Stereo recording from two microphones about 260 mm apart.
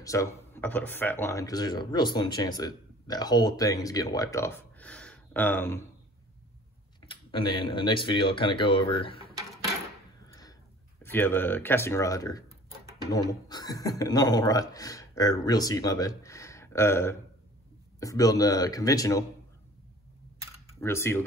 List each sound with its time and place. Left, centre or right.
0.0 s speech: centre
7.1 s speech: centre
10.2 s a sound: centre
11.0 s speech: centre
20.8 s speech: centre